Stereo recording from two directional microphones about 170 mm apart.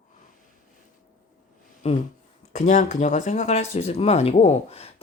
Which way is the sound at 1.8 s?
40° left (ahead or behind).